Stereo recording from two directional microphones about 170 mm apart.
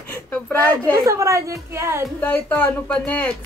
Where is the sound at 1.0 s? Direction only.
15° right (ahead or behind).